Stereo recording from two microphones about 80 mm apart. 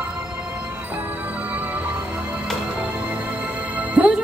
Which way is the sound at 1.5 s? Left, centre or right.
Centre.